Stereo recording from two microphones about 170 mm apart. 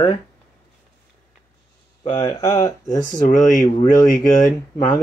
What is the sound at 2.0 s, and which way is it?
Speech, 25° left (ahead or behind).